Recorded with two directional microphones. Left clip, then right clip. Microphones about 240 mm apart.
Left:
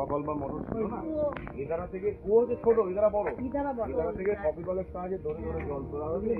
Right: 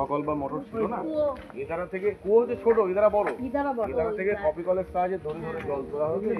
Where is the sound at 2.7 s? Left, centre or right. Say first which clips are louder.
Right 4 dB; right.